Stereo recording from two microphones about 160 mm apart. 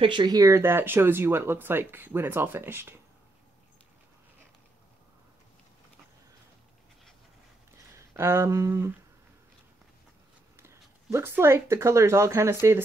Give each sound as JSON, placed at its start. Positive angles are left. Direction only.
{"t": 0.0, "sound": "speech", "side_deg": -30}
{"t": 7.9, "sound": "speech", "side_deg": -15}
{"t": 10.5, "sound": "speech", "side_deg": -15}